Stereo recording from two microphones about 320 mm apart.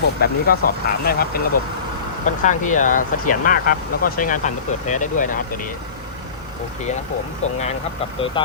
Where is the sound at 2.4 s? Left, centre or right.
Left.